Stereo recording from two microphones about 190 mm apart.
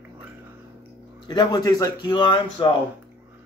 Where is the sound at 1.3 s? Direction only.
20° left (ahead or behind).